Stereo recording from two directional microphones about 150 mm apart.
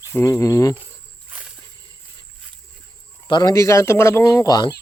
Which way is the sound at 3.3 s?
25° left (ahead or behind).